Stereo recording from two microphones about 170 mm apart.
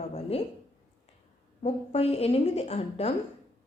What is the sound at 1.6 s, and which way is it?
A woman's voice, 35° left (ahead or behind).